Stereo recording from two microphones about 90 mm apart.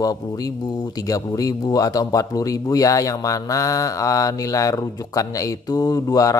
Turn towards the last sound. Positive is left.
turn(degrees=40)  # may be behind; listen again after turning